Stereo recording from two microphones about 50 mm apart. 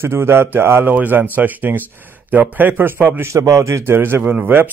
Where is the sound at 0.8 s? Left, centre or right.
Right.